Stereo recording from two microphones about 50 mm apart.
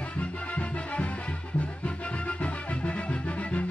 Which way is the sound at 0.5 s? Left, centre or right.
Left.